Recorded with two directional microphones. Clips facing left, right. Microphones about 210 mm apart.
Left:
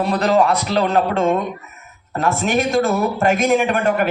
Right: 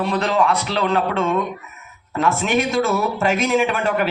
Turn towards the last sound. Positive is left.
turn(degrees=50)  # may be behind; listen again after turning